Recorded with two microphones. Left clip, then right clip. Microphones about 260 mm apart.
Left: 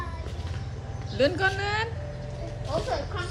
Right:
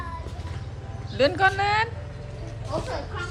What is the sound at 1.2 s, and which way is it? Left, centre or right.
Speech, centre.